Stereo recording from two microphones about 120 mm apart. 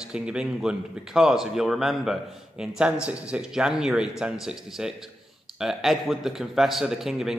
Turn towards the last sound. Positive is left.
turn(degrees=-5)  # may be behind; listen again after turning